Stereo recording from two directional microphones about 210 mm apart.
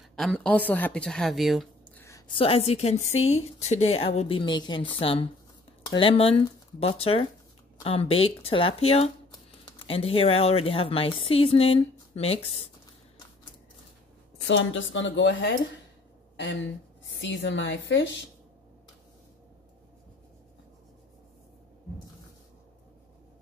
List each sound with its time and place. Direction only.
0.1 s a woman's voice: centre (ahead or behind)
2.0 s a woman's voice: 15° left (ahead or behind)
14.5 s a woman's voice: 65° left (ahead or behind)
17.0 s a woman's voice: 60° left (ahead or behind)